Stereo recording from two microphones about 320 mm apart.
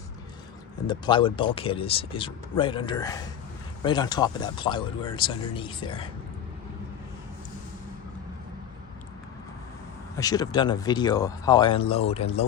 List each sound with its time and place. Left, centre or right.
0.9 s speech: centre
10.2 s speech: centre